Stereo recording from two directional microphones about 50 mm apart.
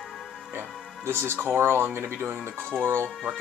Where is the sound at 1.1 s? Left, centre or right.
Right.